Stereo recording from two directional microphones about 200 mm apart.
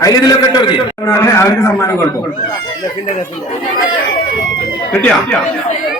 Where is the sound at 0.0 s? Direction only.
20° left (ahead or behind).